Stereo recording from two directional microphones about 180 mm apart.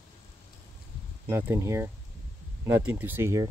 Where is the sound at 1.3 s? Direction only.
15° right (ahead or behind).